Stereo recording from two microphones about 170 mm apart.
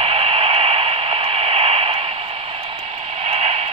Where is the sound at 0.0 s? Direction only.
35° right (ahead or behind).